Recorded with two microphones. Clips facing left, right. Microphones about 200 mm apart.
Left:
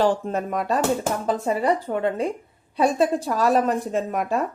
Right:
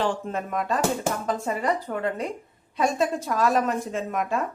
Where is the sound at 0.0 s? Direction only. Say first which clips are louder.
Left 5 dB; 40° left (ahead or behind).